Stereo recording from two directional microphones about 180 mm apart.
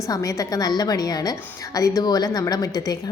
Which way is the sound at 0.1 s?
20° left (ahead or behind).